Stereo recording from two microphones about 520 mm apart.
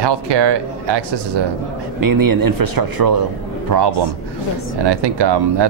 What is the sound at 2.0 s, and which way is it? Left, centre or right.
A man's voice, right.